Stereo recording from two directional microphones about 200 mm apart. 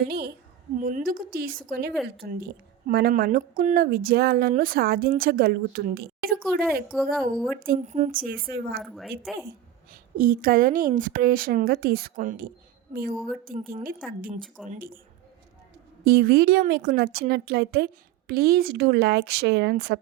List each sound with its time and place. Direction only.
0.1 s a woman's voice: 50° right (ahead or behind)
1.9 s speech: centre (ahead or behind)
2.2 s a woman's voice: 45° right (ahead or behind)
6.4 s speech: centre (ahead or behind)
7.7 s a woman's voice: 35° right (ahead or behind); by 8.8 s 50° right (ahead or behind)
8.8 s speech: centre (ahead or behind)
9.9 s a woman's voice: 45° right (ahead or behind)
13.1 s speech: centre (ahead or behind)
14.1 s a woman's voice: 45° right (ahead or behind)
14.4 s speech: centre (ahead or behind)
14.7 s a woman's voice: 45° right (ahead or behind)
16.0 s a woman's voice: 50° right (ahead or behind)